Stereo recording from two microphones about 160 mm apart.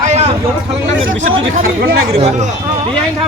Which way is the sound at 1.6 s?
80° right.